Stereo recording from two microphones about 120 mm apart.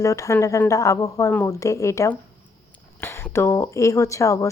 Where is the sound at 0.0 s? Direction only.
25° left (ahead or behind).